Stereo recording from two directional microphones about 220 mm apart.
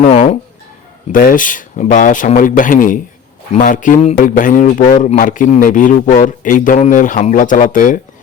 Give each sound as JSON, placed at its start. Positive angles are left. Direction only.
{"t": 0.0, "sound": "a man's voice", "side_deg": 30}